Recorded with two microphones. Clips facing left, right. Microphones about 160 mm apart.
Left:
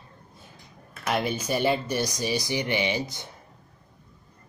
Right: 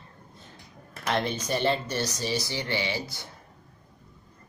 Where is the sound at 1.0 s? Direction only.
10° left (ahead or behind).